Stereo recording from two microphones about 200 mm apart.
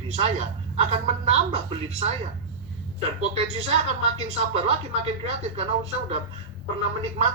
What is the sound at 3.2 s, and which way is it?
Speech, 35° right (ahead or behind).